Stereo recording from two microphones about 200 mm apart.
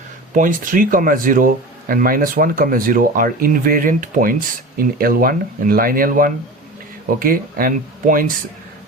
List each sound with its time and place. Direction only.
0.3 s speech: 40° right (ahead or behind)